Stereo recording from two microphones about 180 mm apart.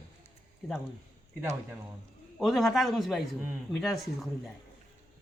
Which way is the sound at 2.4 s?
Centre (ahead or behind).